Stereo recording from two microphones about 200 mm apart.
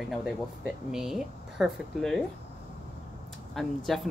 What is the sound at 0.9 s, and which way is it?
Speech, centre (ahead or behind).